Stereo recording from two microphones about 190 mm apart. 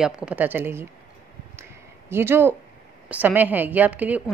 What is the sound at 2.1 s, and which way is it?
A woman's voice, 10° right (ahead or behind).